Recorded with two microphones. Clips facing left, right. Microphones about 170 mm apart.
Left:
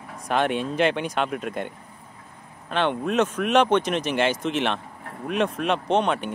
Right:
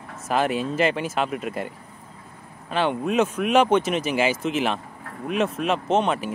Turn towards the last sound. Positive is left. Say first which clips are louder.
# right 1 dB
turn(degrees=-5)  # may be behind; listen again after turning